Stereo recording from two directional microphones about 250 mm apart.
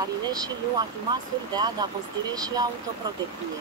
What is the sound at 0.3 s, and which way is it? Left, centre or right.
Speech, centre.